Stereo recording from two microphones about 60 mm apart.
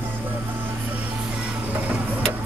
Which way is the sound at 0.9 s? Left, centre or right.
Right.